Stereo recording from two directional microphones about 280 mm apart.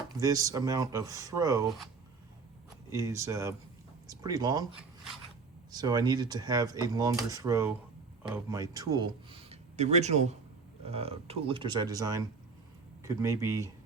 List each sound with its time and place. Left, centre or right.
0.2 s speech: centre
2.9 s speech: centre